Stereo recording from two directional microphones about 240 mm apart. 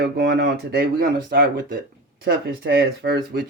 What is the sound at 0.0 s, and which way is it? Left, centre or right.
Speech, right.